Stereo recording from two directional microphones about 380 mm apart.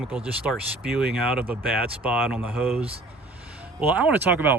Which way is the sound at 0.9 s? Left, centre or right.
Centre.